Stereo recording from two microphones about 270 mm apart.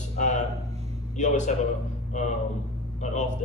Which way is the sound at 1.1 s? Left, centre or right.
Left.